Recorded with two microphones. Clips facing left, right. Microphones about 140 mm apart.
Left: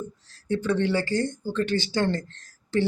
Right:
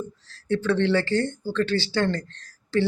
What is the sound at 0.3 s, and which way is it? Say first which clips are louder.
Speech: right 2 dB; 15° left (ahead or behind).